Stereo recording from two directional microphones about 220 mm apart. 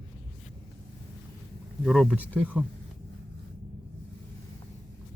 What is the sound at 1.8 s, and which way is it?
Speech, centre (ahead or behind).